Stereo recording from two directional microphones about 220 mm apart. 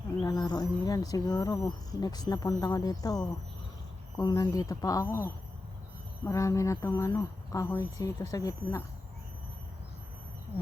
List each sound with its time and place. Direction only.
0.2 s speech: 20° left (ahead or behind)